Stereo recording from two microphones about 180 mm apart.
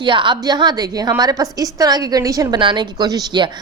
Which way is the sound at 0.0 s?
25° right (ahead or behind).